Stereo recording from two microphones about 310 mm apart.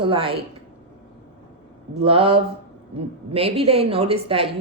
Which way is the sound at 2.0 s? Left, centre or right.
Centre.